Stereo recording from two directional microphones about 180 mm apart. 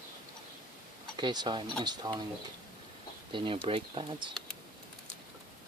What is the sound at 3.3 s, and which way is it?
Speech, 25° right (ahead or behind).